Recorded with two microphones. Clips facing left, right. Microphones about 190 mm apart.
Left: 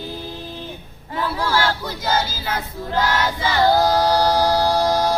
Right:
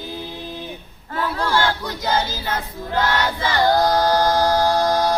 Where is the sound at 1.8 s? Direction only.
5° left (ahead or behind).